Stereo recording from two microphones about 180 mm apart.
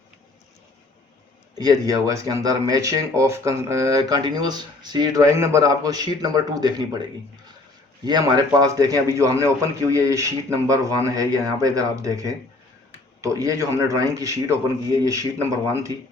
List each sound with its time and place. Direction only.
1.5 s speech: 20° right (ahead or behind)
8.0 s a man's voice: 20° right (ahead or behind)